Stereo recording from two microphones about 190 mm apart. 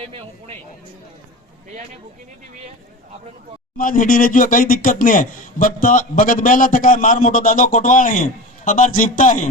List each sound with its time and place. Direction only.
0.0 s a man's voice: 30° right (ahead or behind)
3.8 s speech: 45° left (ahead or behind)